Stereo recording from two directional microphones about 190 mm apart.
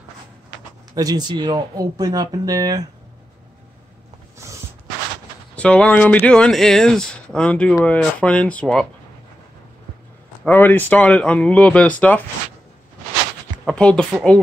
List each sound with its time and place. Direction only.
0.9 s speech: 20° right (ahead or behind)
5.6 s speech: 5° left (ahead or behind)
10.4 s speech: 10° left (ahead or behind)
13.7 s speech: 5° left (ahead or behind)